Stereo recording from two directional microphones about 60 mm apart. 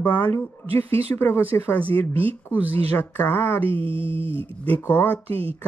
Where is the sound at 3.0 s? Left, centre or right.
Left.